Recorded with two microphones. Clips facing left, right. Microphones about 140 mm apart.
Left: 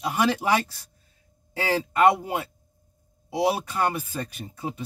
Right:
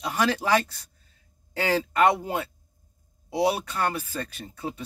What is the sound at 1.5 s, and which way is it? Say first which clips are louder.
Speech: even; 10° left (ahead or behind).